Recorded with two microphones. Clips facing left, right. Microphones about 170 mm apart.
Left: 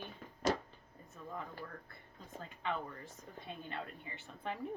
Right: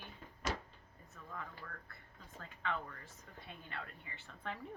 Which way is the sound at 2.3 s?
20° left (ahead or behind).